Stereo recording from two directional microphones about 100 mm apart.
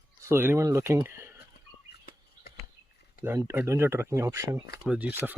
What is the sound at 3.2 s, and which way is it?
Speech, 25° right (ahead or behind).